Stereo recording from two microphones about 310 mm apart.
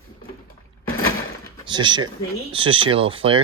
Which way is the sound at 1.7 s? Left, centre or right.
Centre.